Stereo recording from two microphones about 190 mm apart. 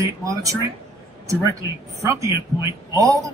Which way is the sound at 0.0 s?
15° right (ahead or behind).